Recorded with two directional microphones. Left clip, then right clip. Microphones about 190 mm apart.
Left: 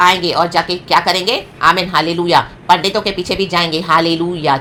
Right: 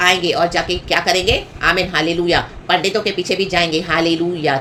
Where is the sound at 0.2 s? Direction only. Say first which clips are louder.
Left 2 dB; 15° left (ahead or behind).